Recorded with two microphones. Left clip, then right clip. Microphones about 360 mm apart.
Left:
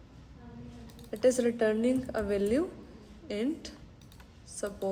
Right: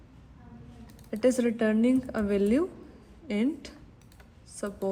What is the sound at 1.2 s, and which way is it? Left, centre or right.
A woman's voice, centre.